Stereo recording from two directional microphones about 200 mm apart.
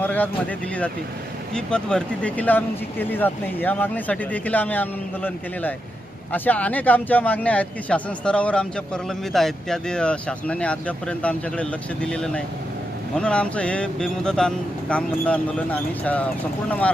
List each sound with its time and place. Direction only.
0.0 s vehicle: 10° left (ahead or behind)
1.5 s a man's voice: 5° left (ahead or behind)